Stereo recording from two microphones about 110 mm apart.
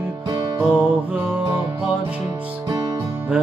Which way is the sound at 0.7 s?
15° right (ahead or behind).